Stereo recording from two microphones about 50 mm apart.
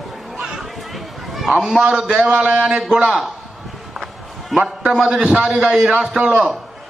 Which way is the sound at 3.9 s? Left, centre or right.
Centre.